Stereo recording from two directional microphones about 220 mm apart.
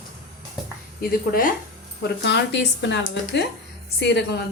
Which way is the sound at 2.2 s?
50° left (ahead or behind).